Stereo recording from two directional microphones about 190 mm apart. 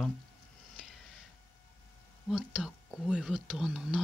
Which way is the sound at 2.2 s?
5° right (ahead or behind).